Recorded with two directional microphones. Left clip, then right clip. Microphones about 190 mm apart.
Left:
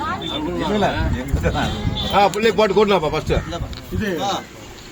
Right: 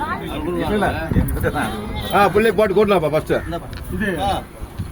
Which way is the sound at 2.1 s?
45° right (ahead or behind).